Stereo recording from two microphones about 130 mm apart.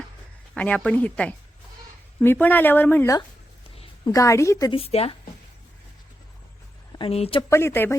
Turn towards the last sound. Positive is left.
turn(degrees=20)  # may be behind; listen again after turning